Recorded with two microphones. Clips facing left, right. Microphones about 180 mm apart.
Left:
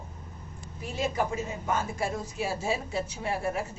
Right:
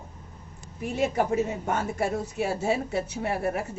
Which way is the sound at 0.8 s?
65° right (ahead or behind).